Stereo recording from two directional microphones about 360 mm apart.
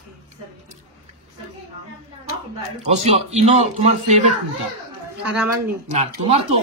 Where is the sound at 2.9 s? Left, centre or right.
Centre.